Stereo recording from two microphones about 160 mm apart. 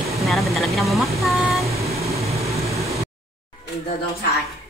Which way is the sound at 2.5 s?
20° right (ahead or behind).